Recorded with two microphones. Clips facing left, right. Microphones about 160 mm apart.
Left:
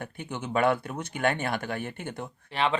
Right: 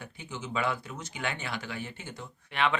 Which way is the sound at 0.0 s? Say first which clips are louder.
Left 5 dB; 55° left (ahead or behind).